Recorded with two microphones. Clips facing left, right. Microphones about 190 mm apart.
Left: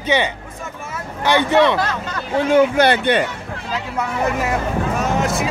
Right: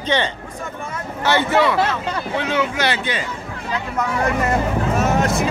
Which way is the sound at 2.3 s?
45° left (ahead or behind).